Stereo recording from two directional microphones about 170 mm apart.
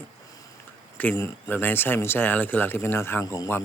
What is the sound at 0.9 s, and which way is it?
Speech, 15° left (ahead or behind).